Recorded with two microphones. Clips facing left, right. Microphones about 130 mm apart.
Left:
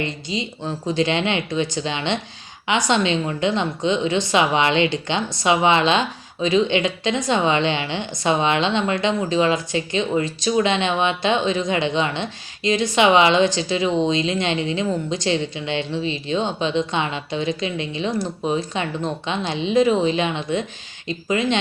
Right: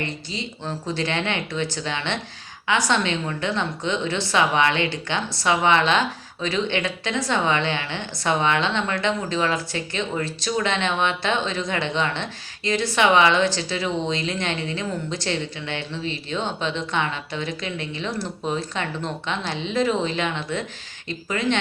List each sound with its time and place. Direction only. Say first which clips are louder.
0.0 s a woman's voice: left 4 dB; 15° left (ahead or behind)